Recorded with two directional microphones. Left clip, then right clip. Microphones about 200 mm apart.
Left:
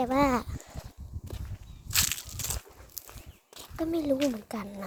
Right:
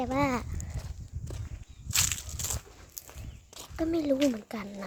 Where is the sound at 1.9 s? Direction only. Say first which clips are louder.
Left 1 dB; 55° left (ahead or behind).